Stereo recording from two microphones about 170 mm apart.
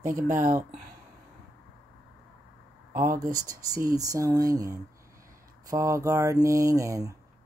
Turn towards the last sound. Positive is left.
turn(degrees=-20)  # may be behind; listen again after turning